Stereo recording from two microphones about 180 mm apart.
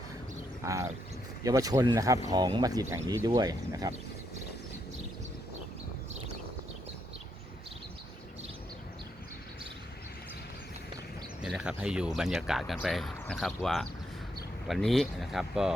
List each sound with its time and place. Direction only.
0.6 s speech: 15° right (ahead or behind)
11.4 s speech: 5° right (ahead or behind)